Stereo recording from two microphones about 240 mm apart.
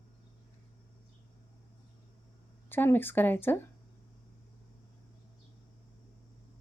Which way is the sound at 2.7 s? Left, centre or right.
Centre.